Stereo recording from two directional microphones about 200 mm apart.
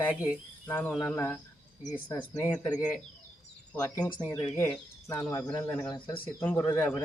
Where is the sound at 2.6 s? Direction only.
20° left (ahead or behind).